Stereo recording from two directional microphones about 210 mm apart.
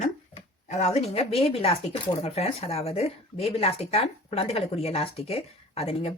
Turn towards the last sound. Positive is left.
turn(degrees=30)  # may be behind; listen again after turning